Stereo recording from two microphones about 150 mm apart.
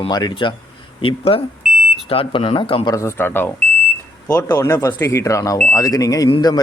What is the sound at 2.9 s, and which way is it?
A man's voice, 15° left (ahead or behind).